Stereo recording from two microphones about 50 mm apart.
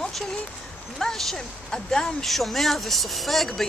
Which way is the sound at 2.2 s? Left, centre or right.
Centre.